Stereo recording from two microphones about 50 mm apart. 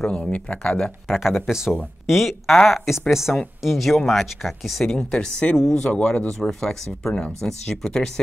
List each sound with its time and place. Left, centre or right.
0.0 s speech: centre
1.0 s speech: centre
4.8 s speech: centre